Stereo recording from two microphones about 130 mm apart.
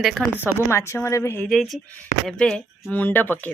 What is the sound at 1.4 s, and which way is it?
Speech, centre (ahead or behind).